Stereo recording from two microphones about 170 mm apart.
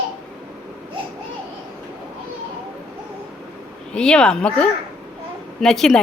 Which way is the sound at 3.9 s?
5° left (ahead or behind).